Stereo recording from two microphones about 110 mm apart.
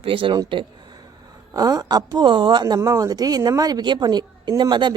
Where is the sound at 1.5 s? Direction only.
35° right (ahead or behind).